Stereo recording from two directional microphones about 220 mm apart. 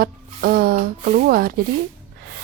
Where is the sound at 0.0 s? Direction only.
40° right (ahead or behind).